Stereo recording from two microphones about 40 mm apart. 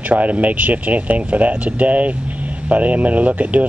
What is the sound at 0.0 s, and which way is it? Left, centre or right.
Speech, right.